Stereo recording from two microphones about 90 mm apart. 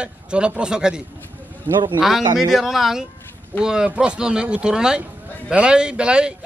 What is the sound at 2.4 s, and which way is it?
A man's voice, 5° right (ahead or behind).